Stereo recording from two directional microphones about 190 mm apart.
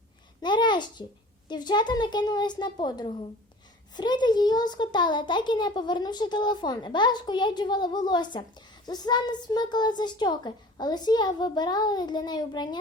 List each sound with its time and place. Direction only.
0.4 s a child's voice: 25° left (ahead or behind)